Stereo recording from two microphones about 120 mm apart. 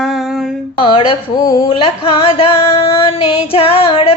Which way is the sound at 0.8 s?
40° left (ahead or behind).